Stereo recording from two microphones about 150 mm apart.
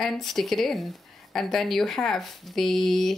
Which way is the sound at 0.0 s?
Centre (ahead or behind).